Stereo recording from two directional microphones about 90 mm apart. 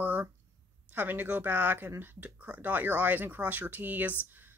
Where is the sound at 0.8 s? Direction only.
20° right (ahead or behind).